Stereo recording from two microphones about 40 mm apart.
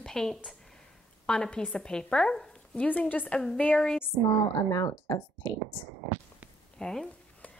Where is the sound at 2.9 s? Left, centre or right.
Left.